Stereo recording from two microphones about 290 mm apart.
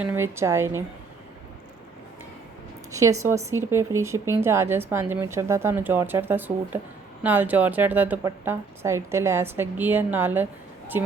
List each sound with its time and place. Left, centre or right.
0.0 s speech: centre
2.9 s speech: centre